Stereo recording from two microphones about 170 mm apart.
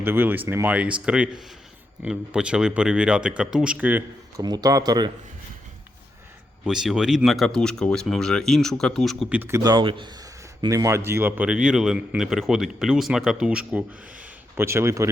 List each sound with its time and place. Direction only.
0.0 s speech: 10° right (ahead or behind)
4.4 s speech: 20° right (ahead or behind)
6.7 s speech: 5° right (ahead or behind)
9.6 s speech: 25° right (ahead or behind)